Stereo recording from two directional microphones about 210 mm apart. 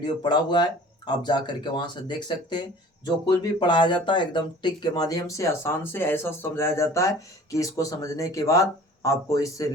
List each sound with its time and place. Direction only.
0.0 s speech: 20° left (ahead or behind)